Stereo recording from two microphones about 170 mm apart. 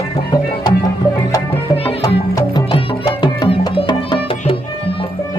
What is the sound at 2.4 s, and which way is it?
Music, 25° left (ahead or behind).